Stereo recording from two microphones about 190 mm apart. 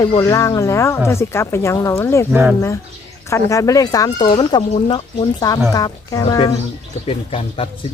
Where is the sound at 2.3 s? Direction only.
10° right (ahead or behind).